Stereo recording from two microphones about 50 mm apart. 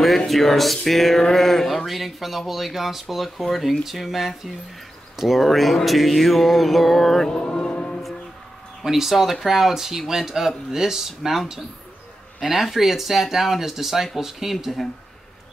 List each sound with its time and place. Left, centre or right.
0.3 s speech: centre
7.2 s music: centre
8.8 s speech: centre